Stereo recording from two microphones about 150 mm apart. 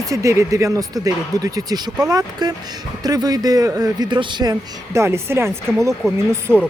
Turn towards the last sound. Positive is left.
turn(degrees=5)  # may be behind; listen again after turning